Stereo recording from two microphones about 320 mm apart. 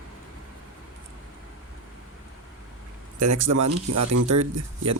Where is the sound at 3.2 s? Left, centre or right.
Right.